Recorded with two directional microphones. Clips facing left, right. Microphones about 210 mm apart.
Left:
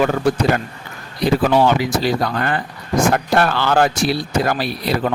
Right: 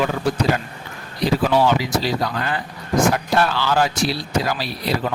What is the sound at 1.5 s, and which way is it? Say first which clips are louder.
Speech: left 1 dB; 55° left (ahead or behind).